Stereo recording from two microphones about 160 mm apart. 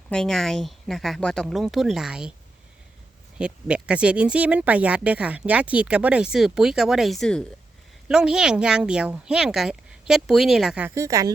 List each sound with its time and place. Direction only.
0.1 s speech: 5° left (ahead or behind)
3.3 s speech: 5° right (ahead or behind)
10.9 s speech: 20° right (ahead or behind)